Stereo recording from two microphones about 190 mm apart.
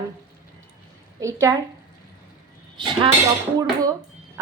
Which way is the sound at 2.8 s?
25° right (ahead or behind).